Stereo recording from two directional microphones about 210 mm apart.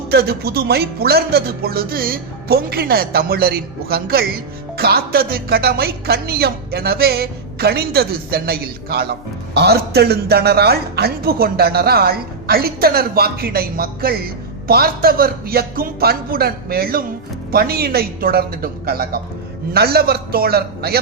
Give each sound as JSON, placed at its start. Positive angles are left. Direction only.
{"t": 0.1, "sound": "a woman's voice", "side_deg": -50}